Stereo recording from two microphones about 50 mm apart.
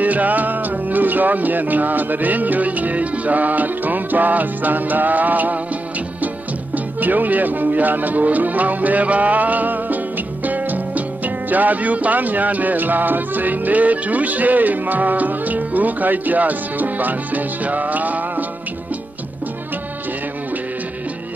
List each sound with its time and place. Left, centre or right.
0.0 s music: right